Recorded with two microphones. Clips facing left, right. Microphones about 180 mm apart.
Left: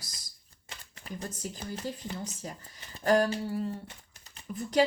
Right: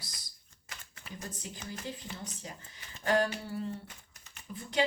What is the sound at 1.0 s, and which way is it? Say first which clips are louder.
Speech: left 6 dB; 35° left (ahead or behind).